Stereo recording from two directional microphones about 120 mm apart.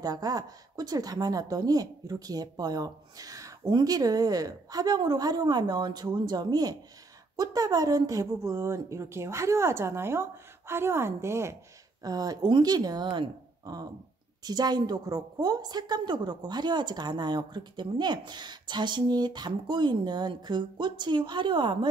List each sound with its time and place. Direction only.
0.0 s a woman's voice: 30° right (ahead or behind)